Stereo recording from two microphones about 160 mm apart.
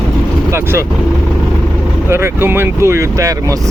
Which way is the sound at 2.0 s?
15° right (ahead or behind).